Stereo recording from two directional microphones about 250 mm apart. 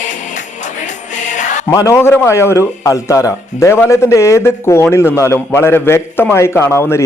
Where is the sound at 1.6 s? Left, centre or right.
Centre.